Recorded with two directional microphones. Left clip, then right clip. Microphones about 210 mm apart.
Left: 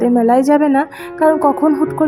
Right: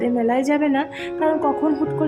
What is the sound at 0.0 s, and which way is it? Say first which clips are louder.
A woman's voice: left 8 dB; 20° left (ahead or behind).